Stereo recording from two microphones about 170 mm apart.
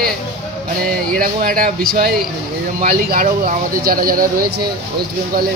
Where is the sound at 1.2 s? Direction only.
55° right (ahead or behind).